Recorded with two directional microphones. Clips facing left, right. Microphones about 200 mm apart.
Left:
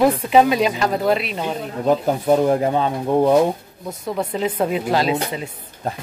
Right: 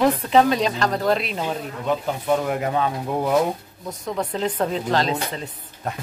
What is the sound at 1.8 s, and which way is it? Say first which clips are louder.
Speech: left 8 dB; 40° left (ahead or behind).